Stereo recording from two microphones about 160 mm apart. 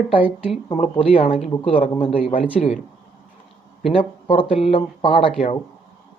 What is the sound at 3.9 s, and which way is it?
Speech, 35° left (ahead or behind).